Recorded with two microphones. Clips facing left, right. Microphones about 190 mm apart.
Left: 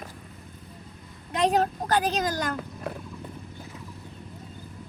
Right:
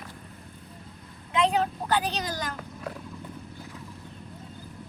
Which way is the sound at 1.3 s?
40° left (ahead or behind).